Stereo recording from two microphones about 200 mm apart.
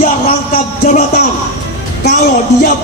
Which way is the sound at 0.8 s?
35° left (ahead or behind).